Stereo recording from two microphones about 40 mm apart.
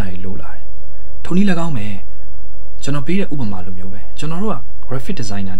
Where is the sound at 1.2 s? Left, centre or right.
Right.